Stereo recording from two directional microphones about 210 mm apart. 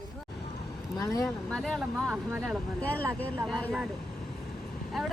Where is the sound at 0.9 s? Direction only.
15° left (ahead or behind).